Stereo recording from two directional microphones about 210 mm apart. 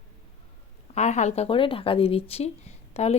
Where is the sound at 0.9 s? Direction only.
35° left (ahead or behind).